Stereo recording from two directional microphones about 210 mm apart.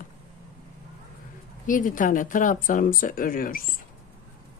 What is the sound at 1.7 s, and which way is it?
Speech, 40° left (ahead or behind).